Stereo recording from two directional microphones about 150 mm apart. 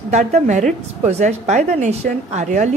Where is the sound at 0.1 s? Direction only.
50° right (ahead or behind).